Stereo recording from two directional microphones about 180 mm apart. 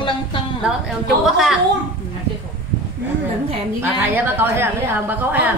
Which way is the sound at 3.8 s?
10° right (ahead or behind).